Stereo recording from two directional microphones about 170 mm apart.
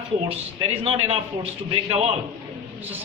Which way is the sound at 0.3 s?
35° right (ahead or behind).